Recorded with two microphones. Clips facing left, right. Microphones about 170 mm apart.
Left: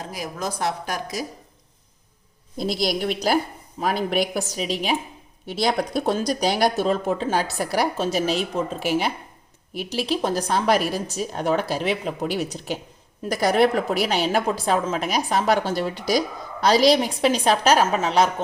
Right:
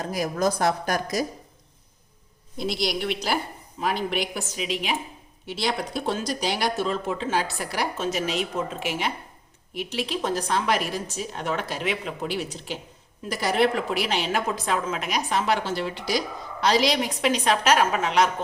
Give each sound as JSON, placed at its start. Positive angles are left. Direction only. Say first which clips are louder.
{"t": 0.1, "sound": "a woman's voice", "louder": "right 7 dB", "side_deg": -45}
{"t": 2.6, "sound": "a woman's voice", "louder": "left 3 dB", "side_deg": 40}